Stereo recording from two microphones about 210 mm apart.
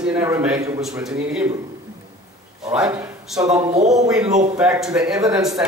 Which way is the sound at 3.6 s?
30° right (ahead or behind).